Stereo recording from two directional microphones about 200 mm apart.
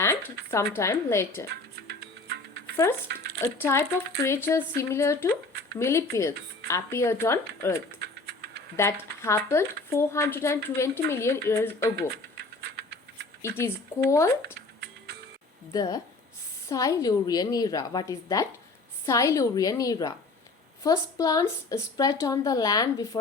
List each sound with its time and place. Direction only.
0.0 s a sound: 15° left (ahead or behind)
0.5 s speech: 15° left (ahead or behind)
3.4 s speech: 15° left (ahead or behind)
12.1 s a sound: 55° right (ahead or behind)
13.4 s speech: 10° left (ahead or behind)
15.7 s speech: 20° left (ahead or behind)